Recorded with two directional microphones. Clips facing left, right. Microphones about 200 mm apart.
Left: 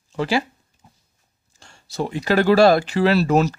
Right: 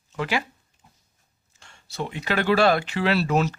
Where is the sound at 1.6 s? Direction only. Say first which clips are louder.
Left 5 dB; 35° left (ahead or behind).